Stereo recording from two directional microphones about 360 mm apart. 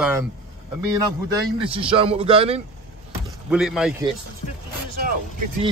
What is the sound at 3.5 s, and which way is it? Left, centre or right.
Speech, centre.